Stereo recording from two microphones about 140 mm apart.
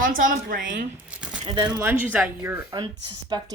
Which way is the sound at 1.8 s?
15° right (ahead or behind).